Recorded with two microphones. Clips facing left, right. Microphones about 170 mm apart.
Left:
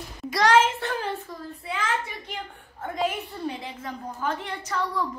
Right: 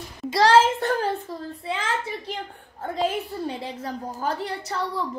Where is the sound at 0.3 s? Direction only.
30° right (ahead or behind).